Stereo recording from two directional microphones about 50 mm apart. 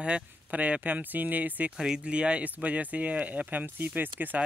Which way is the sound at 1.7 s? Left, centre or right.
Centre.